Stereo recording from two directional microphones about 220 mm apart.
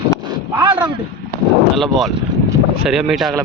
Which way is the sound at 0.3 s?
20° right (ahead or behind).